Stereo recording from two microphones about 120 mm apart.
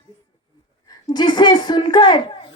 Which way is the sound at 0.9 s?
35° left (ahead or behind).